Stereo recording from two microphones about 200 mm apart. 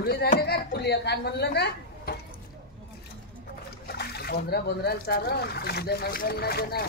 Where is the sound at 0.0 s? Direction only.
50° left (ahead or behind).